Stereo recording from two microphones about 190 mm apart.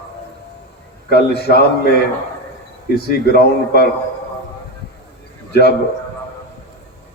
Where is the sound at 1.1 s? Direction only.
60° left (ahead or behind).